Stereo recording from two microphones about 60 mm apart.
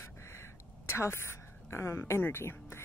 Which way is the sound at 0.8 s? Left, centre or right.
Left.